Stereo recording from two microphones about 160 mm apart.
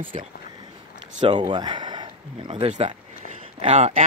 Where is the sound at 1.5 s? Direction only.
30° right (ahead or behind).